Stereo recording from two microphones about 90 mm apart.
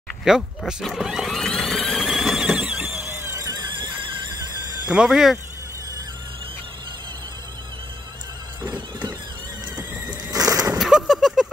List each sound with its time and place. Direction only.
0.3 s speech: 5° right (ahead or behind)
0.8 s a sound: centre (ahead or behind); by 3.3 s 25° right (ahead or behind)
3.4 s horse: 50° right (ahead or behind)
4.8 s speech: 10° right (ahead or behind)
10.2 s bird: 40° right (ahead or behind)
10.8 s a sound: 5° right (ahead or behind)